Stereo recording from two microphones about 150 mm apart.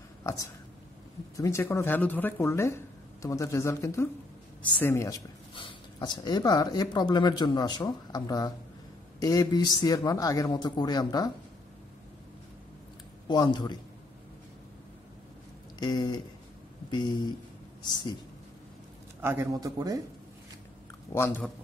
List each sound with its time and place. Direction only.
1.3 s speech: 20° left (ahead or behind)
5.5 s speech: 35° left (ahead or behind)
13.3 s speech: 30° left (ahead or behind)
15.8 s speech: 30° left (ahead or behind)
19.2 s a man's voice: 15° right (ahead or behind)
19.6 s speech: 25° right (ahead or behind)
21.1 s speech: 15° left (ahead or behind)